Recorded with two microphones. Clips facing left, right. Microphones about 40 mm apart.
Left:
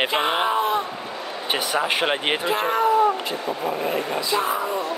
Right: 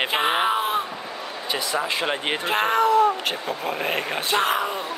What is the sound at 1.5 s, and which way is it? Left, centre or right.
Speech, left.